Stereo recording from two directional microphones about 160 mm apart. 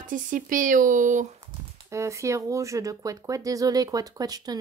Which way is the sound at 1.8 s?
20° right (ahead or behind).